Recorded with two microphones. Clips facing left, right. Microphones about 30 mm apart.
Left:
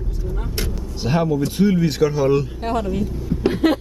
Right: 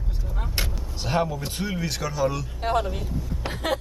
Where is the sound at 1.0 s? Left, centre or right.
Centre.